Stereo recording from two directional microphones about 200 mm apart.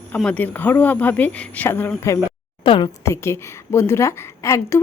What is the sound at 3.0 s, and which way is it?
Speech, 15° left (ahead or behind).